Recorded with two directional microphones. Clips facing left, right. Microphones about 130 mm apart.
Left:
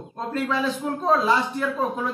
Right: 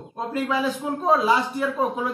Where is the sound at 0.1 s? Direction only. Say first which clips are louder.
Right 1 dB; 10° right (ahead or behind).